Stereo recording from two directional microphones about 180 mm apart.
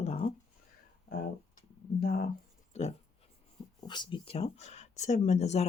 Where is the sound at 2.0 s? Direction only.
55° left (ahead or behind).